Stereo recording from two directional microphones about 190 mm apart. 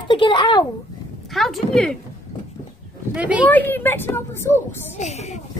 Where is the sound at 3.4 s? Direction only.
10° left (ahead or behind).